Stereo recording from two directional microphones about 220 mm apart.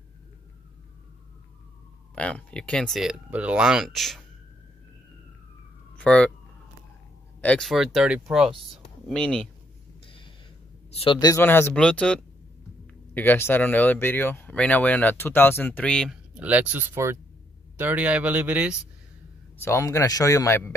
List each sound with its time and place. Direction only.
2.1 s speech: 5° left (ahead or behind)
5.9 s speech: 5° left (ahead or behind)
7.4 s speech: centre (ahead or behind)
10.0 s a sound: 25° left (ahead or behind)
10.9 s speech: 25° left (ahead or behind); by 18.8 s 5° right (ahead or behind)
19.6 s speech: 15° left (ahead or behind)